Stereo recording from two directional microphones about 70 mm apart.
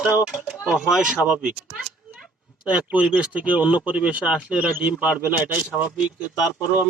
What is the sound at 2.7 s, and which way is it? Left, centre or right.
Speech, centre.